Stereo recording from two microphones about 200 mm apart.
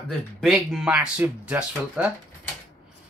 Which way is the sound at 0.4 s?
Centre (ahead or behind).